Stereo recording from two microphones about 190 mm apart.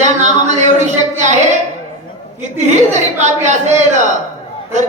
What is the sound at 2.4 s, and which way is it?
A man's voice, 40° right (ahead or behind).